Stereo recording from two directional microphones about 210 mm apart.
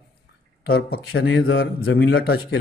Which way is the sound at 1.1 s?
75° left (ahead or behind).